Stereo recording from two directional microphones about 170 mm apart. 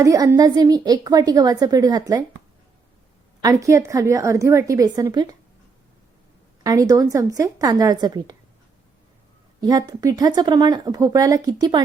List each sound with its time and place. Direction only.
0.0 s speech: 20° right (ahead or behind)
3.4 s speech: 20° right (ahead or behind)
6.6 s speech: 20° right (ahead or behind)
9.6 s speech: 20° right (ahead or behind)